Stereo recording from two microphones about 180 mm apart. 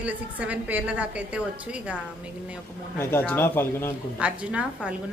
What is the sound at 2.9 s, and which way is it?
Speech, 10° left (ahead or behind).